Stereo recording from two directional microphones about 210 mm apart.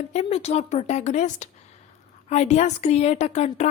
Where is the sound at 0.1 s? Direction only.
30° left (ahead or behind).